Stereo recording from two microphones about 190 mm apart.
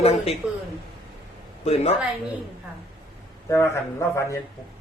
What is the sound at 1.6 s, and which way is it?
Speech, 35° left (ahead or behind).